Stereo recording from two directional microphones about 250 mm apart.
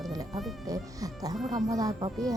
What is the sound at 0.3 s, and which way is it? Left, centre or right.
Speech, centre.